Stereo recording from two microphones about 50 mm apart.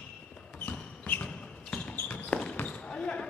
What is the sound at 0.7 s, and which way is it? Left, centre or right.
Basketball bounce, left.